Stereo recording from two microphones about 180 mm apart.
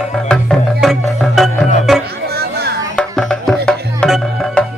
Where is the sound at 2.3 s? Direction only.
60° right (ahead or behind).